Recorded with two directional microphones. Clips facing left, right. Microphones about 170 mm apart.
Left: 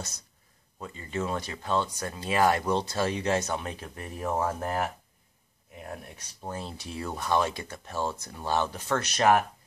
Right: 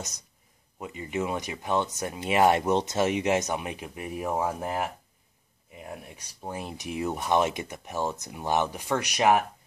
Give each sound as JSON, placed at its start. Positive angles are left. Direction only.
{"t": 0.7, "sound": "speech", "side_deg": -15}